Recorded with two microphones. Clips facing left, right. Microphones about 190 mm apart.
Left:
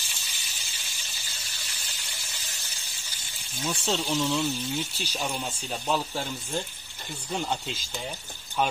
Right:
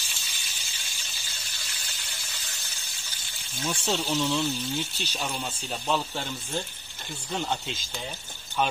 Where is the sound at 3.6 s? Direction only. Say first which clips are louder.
Even; centre (ahead or behind).